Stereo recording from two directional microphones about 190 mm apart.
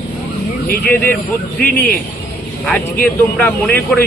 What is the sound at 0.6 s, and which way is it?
Speech, 50° left (ahead or behind).